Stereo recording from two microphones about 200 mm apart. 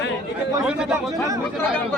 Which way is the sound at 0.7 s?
5° right (ahead or behind).